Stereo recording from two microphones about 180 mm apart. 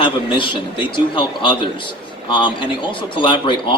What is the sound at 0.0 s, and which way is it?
Speech, 25° left (ahead or behind).